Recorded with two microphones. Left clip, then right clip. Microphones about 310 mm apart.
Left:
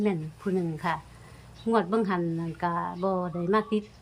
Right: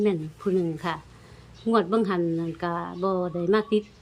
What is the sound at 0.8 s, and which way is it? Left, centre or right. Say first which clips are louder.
Speech: left 1 dB; centre.